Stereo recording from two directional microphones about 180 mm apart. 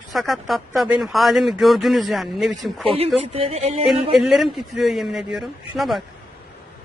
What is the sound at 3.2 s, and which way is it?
Speech, 35° right (ahead or behind).